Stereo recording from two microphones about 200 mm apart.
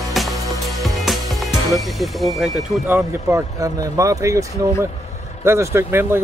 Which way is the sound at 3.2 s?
15° right (ahead or behind).